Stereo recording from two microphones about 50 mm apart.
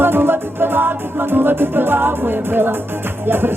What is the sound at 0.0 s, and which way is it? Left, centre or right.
Music, right.